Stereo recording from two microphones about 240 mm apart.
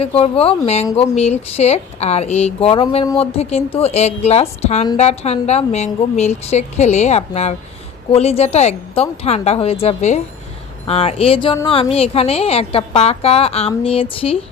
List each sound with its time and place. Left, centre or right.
0.0 s a woman's voice: left